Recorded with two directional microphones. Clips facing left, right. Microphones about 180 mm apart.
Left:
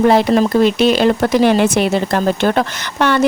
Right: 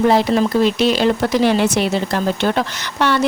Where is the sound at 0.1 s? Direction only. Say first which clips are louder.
Left 3 dB; 55° left (ahead or behind).